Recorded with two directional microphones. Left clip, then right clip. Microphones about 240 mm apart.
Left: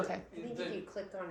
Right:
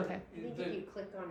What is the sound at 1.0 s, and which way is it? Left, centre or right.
Speech, left.